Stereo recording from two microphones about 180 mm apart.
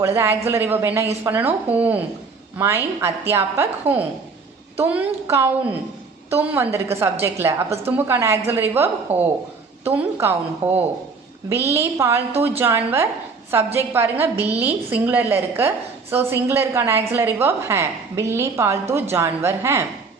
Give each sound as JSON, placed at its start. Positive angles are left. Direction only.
{"t": 0.0, "sound": "a woman's voice", "side_deg": -15}